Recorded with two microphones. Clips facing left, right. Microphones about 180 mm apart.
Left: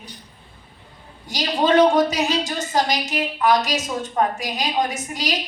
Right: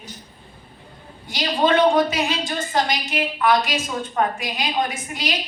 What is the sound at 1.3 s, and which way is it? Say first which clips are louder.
A woman's voice: left 1 dB; 40° left (ahead or behind).